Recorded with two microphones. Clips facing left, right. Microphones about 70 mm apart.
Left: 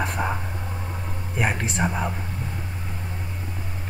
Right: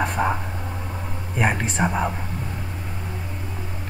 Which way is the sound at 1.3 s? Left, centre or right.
Centre.